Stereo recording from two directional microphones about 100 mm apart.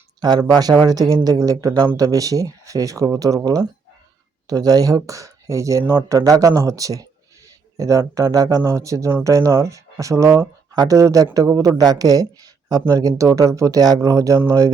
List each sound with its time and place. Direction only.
0.2 s speech: 45° right (ahead or behind)
5.8 s speech: 20° right (ahead or behind)
6.1 s speech: 35° right (ahead or behind)